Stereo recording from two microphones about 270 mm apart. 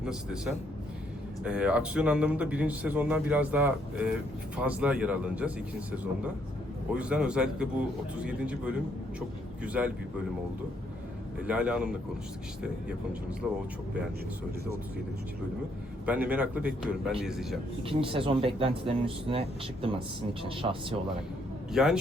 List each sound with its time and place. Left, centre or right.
0.0 s a man's voice: centre
6.9 s a man's voice: centre
9.8 s a man's voice: centre
11.4 s a man's voice: centre
16.0 s a man's voice: centre
17.8 s speech: centre
21.7 s a man's voice: centre